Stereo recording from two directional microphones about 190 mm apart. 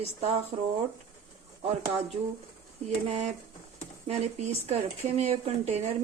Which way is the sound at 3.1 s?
35° right (ahead or behind).